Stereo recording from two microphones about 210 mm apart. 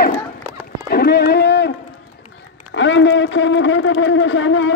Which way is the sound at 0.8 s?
50° left (ahead or behind).